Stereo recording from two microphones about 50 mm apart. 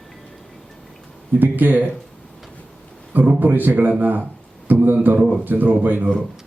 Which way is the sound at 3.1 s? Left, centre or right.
Right.